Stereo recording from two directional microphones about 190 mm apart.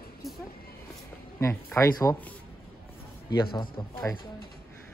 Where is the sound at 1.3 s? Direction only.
15° left (ahead or behind).